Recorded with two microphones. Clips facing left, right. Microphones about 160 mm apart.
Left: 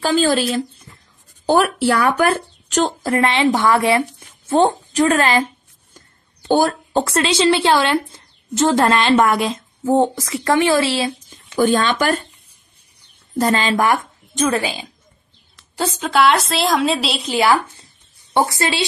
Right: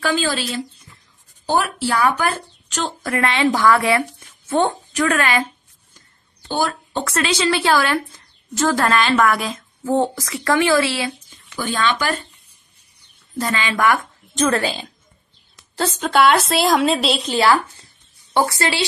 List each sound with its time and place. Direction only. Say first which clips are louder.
0.0 s speech: left 5 dB; 45° left (ahead or behind)
1.4 s speech: left 5 dB; 60° left (ahead or behind)
3.0 s a woman's voice: right 2 dB; 25° left (ahead or behind)
6.5 s a woman's voice: left 6 dB; 45° left (ahead or behind); by 11.1 s 25° left (ahead or behind)
11.2 s speech: left 10 dB; 45° left (ahead or behind)
13.4 s speech: left 5 dB; 50° left (ahead or behind)
13.7 s speech: left 1 dB; 25° left (ahead or behind)
14.4 s a woman's voice: even; 15° left (ahead or behind)
17.4 s a woman's voice: left 2 dB; 20° left (ahead or behind)